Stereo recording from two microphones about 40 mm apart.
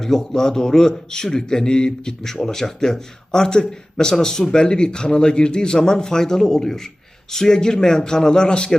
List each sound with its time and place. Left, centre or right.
0.0 s a man's voice: centre